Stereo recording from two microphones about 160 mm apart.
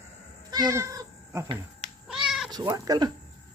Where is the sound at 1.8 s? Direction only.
5° right (ahead or behind).